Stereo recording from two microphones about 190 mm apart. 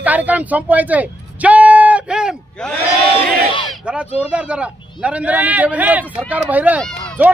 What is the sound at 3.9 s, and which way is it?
A man's voice, 5° right (ahead or behind).